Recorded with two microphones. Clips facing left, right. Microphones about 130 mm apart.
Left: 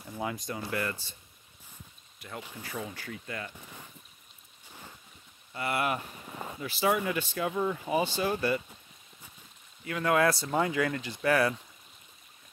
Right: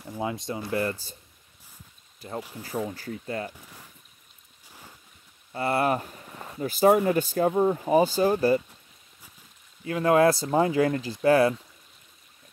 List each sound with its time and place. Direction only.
0.2 s speech: 25° right (ahead or behind)
2.1 s speech: 30° right (ahead or behind)
3.5 s speech: centre (ahead or behind)
4.6 s boat: 5° right (ahead or behind)
5.5 s speech: 35° right (ahead or behind)
6.2 s a sound: 10° left (ahead or behind)
6.6 s speech: 45° right (ahead or behind)
9.8 s speech: 30° right (ahead or behind)